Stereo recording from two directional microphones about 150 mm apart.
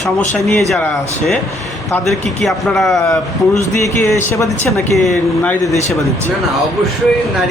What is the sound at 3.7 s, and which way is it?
Speech, 20° left (ahead or behind).